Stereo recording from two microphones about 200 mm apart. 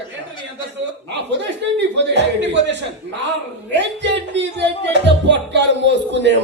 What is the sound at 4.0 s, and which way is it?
Music, 60° right (ahead or behind).